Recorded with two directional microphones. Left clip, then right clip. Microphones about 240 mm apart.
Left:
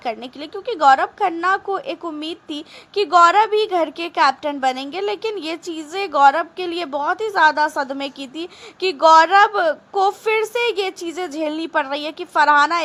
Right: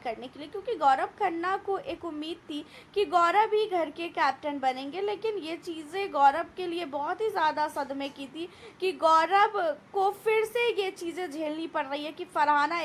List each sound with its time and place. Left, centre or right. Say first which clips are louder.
0.0 s a woman's voice: left 9 dB; left